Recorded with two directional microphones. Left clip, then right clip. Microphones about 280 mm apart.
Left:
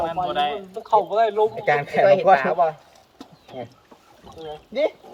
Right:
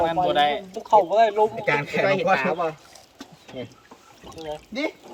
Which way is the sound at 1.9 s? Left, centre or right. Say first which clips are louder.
Left 8 dB; centre.